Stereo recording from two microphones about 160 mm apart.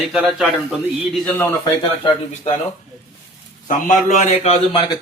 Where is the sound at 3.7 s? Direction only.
50° left (ahead or behind).